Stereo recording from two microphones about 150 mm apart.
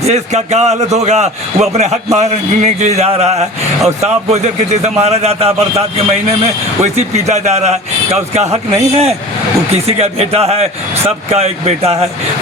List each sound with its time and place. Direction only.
0.0 s a man's voice: 45° right (ahead or behind)